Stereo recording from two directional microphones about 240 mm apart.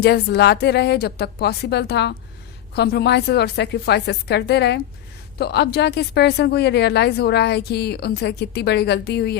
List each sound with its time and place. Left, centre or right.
0.0 s speech: left